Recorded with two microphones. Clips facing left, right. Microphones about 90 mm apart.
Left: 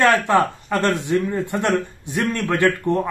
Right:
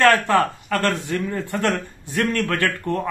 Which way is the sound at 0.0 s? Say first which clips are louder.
Even; 20° left (ahead or behind).